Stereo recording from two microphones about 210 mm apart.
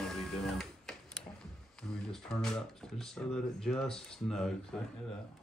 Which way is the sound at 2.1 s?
Centre (ahead or behind).